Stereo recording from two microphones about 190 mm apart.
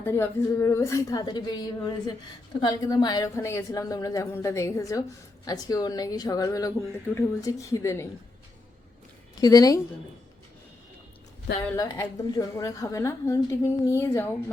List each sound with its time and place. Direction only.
0.0 s a woman's voice: 15° left (ahead or behind)
9.3 s a woman's voice: 20° left (ahead or behind)
11.8 s a woman's voice: 20° left (ahead or behind)